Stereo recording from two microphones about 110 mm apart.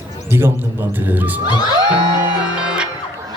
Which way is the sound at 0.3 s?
20° right (ahead or behind).